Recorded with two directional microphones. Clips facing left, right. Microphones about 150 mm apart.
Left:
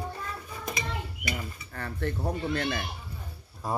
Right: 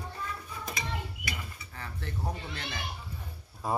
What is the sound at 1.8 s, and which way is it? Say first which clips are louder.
Speech: left 7 dB; 55° left (ahead or behind).